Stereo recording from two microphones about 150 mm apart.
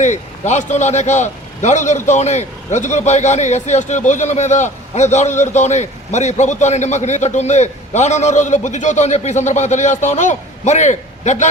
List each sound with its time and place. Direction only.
0.0 s a man's voice: 50° left (ahead or behind)